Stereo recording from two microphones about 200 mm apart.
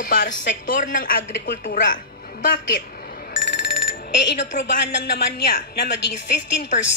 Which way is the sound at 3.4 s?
60° left (ahead or behind).